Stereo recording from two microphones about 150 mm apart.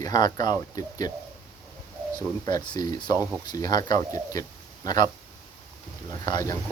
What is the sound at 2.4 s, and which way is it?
Speech, 30° left (ahead or behind).